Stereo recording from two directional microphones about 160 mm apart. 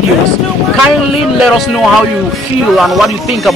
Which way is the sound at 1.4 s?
Centre (ahead or behind).